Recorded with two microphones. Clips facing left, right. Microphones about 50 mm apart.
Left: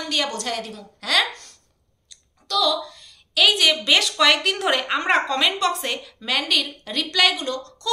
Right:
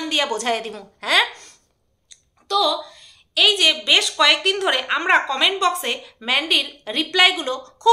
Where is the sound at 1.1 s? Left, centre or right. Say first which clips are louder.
Right 3 dB; centre.